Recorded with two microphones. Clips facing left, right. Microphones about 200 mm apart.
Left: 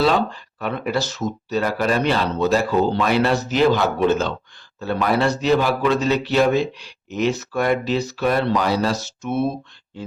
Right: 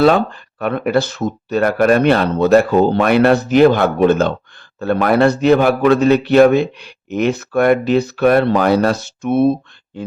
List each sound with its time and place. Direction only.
0.0 s a man's voice: 55° right (ahead or behind)